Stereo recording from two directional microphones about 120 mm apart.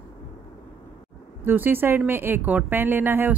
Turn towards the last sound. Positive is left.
turn(degrees=-15)  # may be behind; listen again after turning